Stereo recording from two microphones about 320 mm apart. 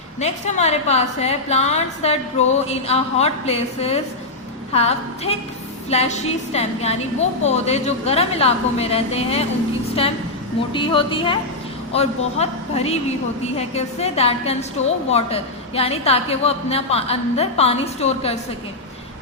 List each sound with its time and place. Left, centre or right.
0.2 s a woman's voice: left
10.7 s a woman's voice: centre